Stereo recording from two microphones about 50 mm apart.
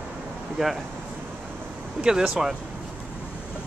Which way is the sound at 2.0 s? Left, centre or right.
Centre.